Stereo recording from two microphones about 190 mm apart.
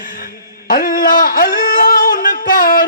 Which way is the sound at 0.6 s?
45° left (ahead or behind).